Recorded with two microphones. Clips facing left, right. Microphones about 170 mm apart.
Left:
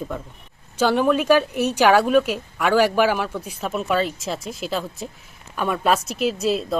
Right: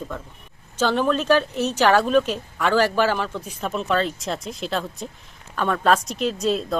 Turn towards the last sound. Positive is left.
turn(degrees=5)  # may be behind; listen again after turning